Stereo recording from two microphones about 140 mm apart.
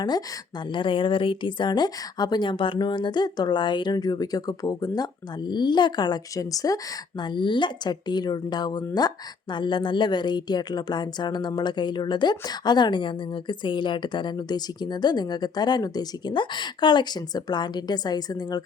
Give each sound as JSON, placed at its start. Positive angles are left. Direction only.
{"t": 0.7, "sound": "a woman's voice", "side_deg": 35}
{"t": 7.2, "sound": "a woman's voice", "side_deg": 35}